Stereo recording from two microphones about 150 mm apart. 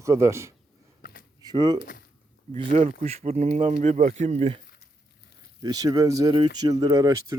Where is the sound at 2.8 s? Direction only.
45° right (ahead or behind).